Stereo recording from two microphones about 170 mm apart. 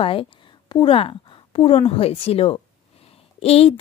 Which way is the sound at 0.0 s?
30° left (ahead or behind).